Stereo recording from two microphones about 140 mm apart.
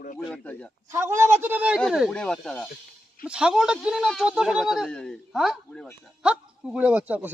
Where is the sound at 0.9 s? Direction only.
20° right (ahead or behind); by 2.6 s 5° left (ahead or behind).